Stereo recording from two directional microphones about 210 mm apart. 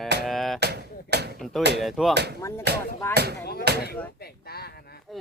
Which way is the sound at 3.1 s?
50° right (ahead or behind).